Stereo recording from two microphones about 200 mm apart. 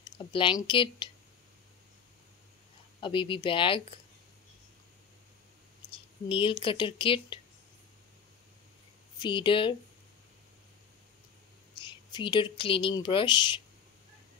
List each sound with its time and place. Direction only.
0.0 s speech: 25° left (ahead or behind)
3.0 s speech: 25° left (ahead or behind)
5.9 s speech: 25° left (ahead or behind)
9.2 s speech: 25° left (ahead or behind)
11.8 s speech: 25° left (ahead or behind)